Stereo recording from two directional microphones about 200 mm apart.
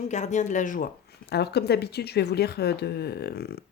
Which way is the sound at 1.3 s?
55° left (ahead or behind).